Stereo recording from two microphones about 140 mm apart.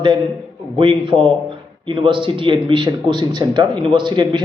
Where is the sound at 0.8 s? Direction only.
35° right (ahead or behind).